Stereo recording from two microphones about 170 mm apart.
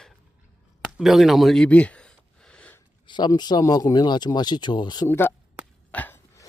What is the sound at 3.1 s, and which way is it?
Speech, 25° left (ahead or behind).